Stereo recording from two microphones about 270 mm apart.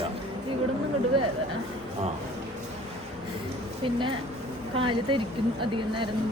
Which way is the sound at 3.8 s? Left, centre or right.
Centre.